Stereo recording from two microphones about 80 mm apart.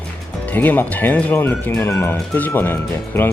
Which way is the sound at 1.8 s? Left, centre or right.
Left.